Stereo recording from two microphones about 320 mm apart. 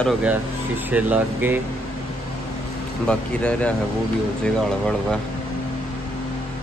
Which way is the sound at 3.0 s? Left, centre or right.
Centre.